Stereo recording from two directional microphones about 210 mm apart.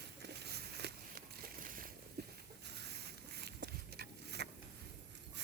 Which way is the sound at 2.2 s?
50° right (ahead or behind).